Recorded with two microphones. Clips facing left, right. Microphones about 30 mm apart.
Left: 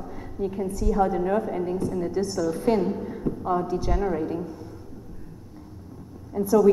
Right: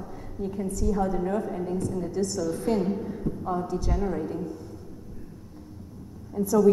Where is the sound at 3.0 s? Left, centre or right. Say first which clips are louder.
Left 3 dB; left.